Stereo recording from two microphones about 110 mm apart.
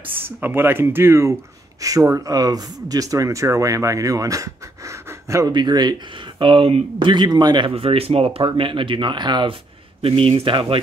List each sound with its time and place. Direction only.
0.0 s speech: 20° right (ahead or behind)
5.5 s speech: 40° right (ahead or behind)
6.4 s speech: 55° right (ahead or behind)
7.7 s speech: 60° right (ahead or behind); by 9.6 s 45° right (ahead or behind)
10.0 s speech: 60° right (ahead or behind)